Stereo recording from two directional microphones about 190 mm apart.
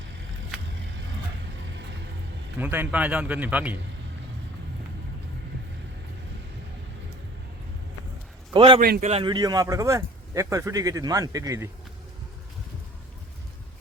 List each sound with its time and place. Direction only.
2.6 s speech: 10° right (ahead or behind)
8.5 s a man's voice: 25° right (ahead or behind)
8.8 s a man's voice: 45° right (ahead or behind)
9.2 s speech: 20° right (ahead or behind)